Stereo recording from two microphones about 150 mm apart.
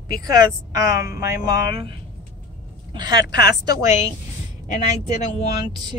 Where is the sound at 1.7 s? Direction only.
40° right (ahead or behind).